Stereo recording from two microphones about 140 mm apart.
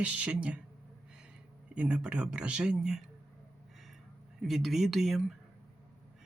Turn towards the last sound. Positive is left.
turn(degrees=0)  # may be behind; listen again after turning